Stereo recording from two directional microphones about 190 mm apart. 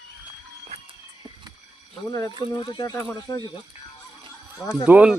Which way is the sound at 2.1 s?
20° left (ahead or behind).